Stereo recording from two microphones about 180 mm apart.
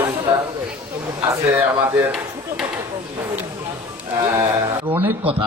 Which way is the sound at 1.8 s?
10° right (ahead or behind).